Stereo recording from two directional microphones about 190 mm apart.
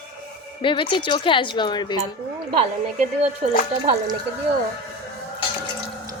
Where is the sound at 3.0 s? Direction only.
35° right (ahead or behind).